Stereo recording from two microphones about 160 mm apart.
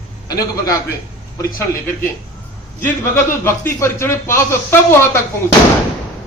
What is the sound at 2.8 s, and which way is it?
Speech, 15° left (ahead or behind).